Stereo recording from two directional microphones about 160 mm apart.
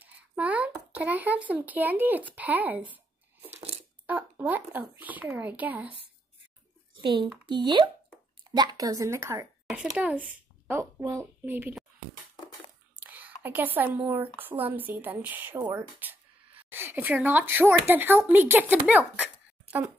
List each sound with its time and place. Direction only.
0.0 s speech: 10° right (ahead or behind)
4.0 s a woman's voice: 10° right (ahead or behind)
7.0 s a woman's voice: 30° right (ahead or behind)
9.7 s a child's voice: 5° right (ahead or behind)
13.0 s a woman's voice: 10° right (ahead or behind)